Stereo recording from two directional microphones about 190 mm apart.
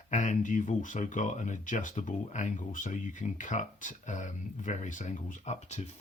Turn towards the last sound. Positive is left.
turn(degrees=35)  # may be behind; listen again after turning